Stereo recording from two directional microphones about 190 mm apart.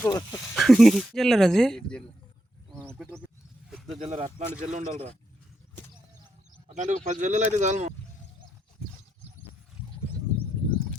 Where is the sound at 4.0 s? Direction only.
30° right (ahead or behind).